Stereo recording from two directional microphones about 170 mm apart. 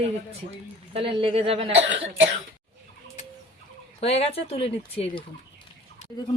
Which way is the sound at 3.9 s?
35° left (ahead or behind).